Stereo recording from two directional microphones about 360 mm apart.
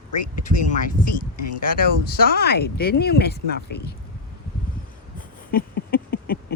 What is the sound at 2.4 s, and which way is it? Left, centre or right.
Speech, left.